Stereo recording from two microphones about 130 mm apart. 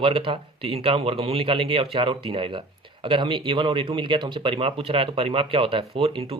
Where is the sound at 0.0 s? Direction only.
45° right (ahead or behind).